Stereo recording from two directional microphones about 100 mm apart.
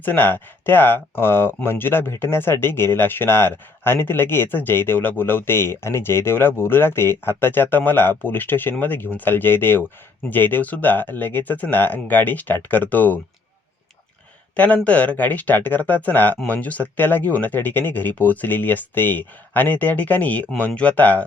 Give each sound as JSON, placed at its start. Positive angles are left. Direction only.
{"t": 0.0, "sound": "speech", "side_deg": 20}
{"t": 14.5, "sound": "speech", "side_deg": 15}